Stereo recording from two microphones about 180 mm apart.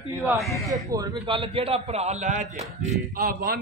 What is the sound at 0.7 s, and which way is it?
Speech, 20° right (ahead or behind).